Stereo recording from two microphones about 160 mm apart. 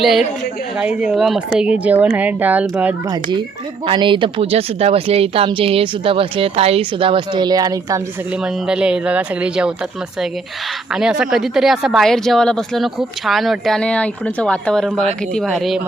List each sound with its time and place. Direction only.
0.0 s speech: centre (ahead or behind)
3.1 s speech: 30° right (ahead or behind)
8.3 s speech: 5° right (ahead or behind)
10.9 s speech: 5° right (ahead or behind)